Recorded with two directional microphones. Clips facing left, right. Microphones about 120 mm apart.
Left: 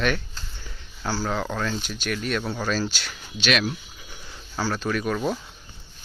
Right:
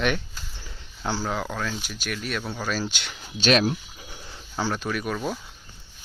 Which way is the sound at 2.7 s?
15° right (ahead or behind).